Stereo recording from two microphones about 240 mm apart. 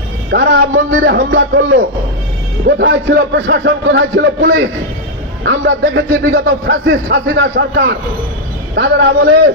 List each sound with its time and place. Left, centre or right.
0.3 s a man's voice: right